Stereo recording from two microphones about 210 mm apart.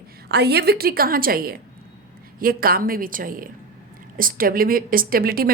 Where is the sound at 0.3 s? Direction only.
50° right (ahead or behind).